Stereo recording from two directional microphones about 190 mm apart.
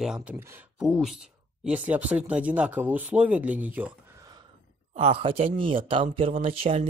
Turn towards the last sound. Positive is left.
turn(degrees=-30)  # may be behind; listen again after turning